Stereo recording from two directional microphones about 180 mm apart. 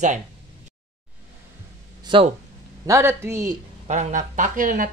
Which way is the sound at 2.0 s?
30° right (ahead or behind).